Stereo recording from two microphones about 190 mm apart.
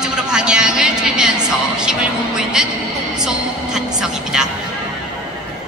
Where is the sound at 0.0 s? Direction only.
5° right (ahead or behind).